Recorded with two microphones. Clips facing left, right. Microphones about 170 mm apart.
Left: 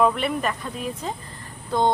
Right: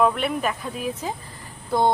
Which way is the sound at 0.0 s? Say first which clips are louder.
Even; centre (ahead or behind).